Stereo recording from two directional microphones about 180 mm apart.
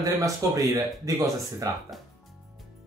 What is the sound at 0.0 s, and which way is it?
Speech, 20° right (ahead or behind).